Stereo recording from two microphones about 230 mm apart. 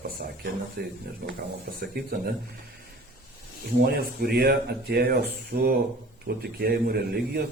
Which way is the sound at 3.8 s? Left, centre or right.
Right.